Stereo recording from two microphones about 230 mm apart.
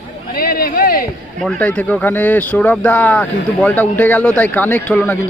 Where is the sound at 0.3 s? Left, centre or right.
Left.